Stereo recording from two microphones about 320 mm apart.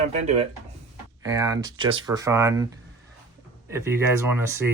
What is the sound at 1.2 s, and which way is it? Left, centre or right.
Speech, centre.